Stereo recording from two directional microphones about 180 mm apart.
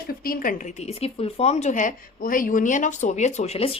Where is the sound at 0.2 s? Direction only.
50° left (ahead or behind).